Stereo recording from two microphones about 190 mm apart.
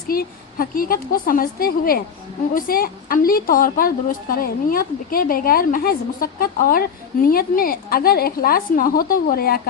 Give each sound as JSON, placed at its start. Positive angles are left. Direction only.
{"t": 0.1, "sound": "a woman's voice", "side_deg": 50}